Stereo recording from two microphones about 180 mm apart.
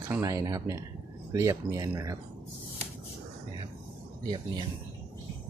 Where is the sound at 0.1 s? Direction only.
15° right (ahead or behind).